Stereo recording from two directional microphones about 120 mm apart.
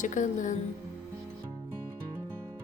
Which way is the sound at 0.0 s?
90° left.